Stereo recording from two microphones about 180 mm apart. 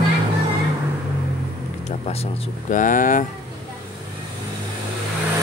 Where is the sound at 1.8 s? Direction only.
35° left (ahead or behind).